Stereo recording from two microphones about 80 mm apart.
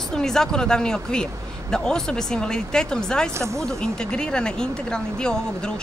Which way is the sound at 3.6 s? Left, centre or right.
Centre.